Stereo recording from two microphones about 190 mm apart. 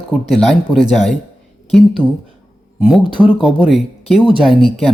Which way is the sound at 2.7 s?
5° right (ahead or behind).